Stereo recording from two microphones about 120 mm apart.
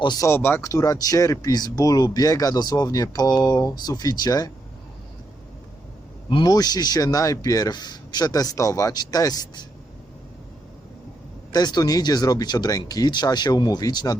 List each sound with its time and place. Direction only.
0.0 s speech: 35° left (ahead or behind)
0.3 s speech: 20° left (ahead or behind)
6.3 s speech: 35° left (ahead or behind)
11.5 s speech: 35° left (ahead or behind)